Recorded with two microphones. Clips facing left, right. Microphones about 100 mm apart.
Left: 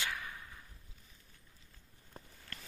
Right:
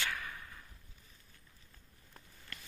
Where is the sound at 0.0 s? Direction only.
15° left (ahead or behind).